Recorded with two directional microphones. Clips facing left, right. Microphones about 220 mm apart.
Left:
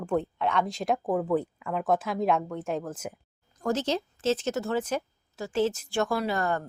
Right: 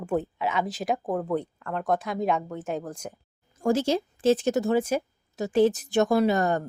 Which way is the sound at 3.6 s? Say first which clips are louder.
Right 4 dB; 10° right (ahead or behind).